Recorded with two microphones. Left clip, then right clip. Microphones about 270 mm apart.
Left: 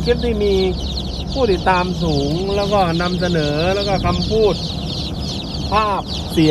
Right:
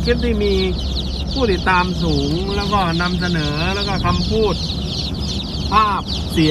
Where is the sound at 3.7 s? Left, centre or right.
Right.